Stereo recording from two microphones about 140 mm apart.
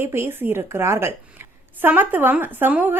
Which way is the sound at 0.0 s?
15° right (ahead or behind).